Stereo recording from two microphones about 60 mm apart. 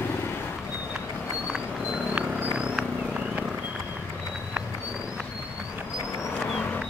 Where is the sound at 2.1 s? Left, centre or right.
Centre.